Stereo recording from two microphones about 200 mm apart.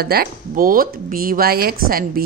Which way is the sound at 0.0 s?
50° right (ahead or behind).